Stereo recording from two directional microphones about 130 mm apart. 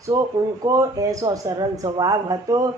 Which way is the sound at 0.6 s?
25° right (ahead or behind).